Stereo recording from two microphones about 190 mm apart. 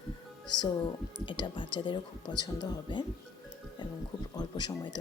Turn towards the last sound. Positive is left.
turn(degrees=25)  # may be behind; listen again after turning